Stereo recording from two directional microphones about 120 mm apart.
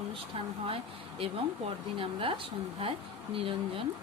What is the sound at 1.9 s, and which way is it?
Speech, 45° right (ahead or behind).